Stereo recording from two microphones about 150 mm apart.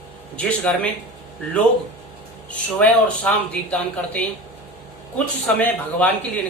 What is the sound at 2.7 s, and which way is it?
Speech, 10° left (ahead or behind).